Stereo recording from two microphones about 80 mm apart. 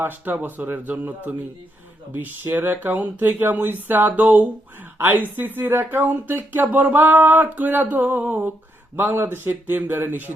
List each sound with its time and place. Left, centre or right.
0.0 s speech: right